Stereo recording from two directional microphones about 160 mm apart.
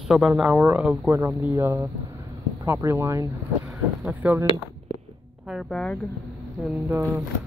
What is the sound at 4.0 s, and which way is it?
Speech, 10° right (ahead or behind).